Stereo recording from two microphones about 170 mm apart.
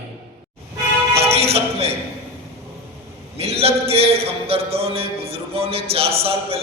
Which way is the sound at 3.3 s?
35° right (ahead or behind).